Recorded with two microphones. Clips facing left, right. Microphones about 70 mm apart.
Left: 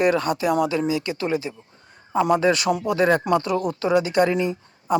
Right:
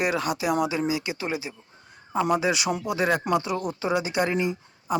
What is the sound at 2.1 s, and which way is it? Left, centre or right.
Speech, left.